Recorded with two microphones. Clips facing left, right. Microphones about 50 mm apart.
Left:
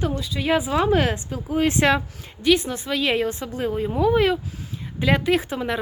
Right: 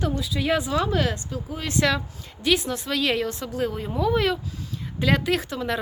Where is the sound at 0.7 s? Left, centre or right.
Left.